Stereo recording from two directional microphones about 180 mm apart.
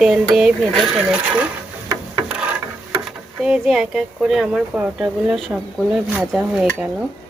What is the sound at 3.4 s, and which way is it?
Speech, 5° right (ahead or behind).